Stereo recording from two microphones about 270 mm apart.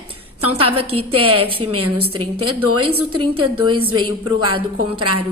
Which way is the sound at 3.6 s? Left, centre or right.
Centre.